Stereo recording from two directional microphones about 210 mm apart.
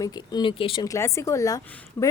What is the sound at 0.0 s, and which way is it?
A woman's voice, 20° left (ahead or behind).